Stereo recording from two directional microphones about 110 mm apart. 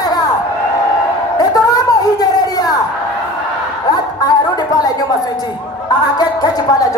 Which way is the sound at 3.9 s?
35° left (ahead or behind).